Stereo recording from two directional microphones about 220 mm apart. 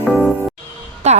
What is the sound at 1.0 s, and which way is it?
Music, 30° right (ahead or behind).